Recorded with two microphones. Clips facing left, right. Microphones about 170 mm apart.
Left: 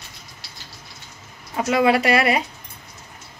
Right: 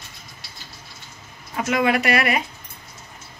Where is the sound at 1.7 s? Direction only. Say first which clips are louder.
Left 3 dB; 30° left (ahead or behind).